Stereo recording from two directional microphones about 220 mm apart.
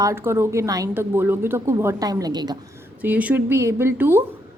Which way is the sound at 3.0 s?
5° right (ahead or behind).